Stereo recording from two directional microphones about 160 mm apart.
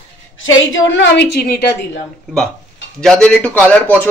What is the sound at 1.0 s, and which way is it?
A woman's voice, 90° left.